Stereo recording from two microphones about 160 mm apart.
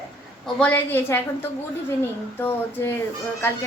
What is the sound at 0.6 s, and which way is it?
Speech, 10° left (ahead or behind).